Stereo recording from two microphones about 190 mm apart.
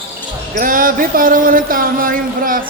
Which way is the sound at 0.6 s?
45° right (ahead or behind).